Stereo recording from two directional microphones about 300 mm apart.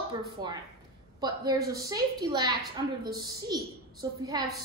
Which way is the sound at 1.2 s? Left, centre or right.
Centre.